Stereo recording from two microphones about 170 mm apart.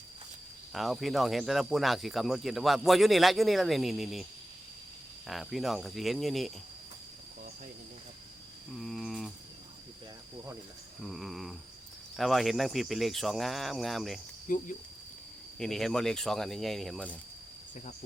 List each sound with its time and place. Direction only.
0.7 s speech: centre (ahead or behind)
5.3 s speech: centre (ahead or behind)
8.8 s a sound: centre (ahead or behind)
11.0 s speech: centre (ahead or behind)
14.4 s speech: 50° left (ahead or behind)
15.5 s speech: 5° left (ahead or behind)